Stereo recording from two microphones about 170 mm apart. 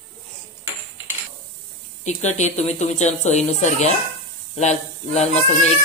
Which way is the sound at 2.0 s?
45° left (ahead or behind).